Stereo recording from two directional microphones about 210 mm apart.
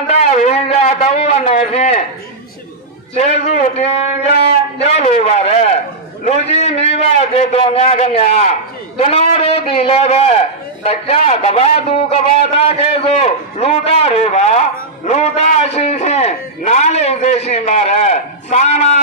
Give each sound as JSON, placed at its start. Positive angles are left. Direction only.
{"t": 0.0, "sound": "a man's voice", "side_deg": 30}
{"t": 3.2, "sound": "a man's voice", "side_deg": 30}
{"t": 4.3, "sound": "a man's voice", "side_deg": 50}
{"t": 4.9, "sound": "a man's voice", "side_deg": 30}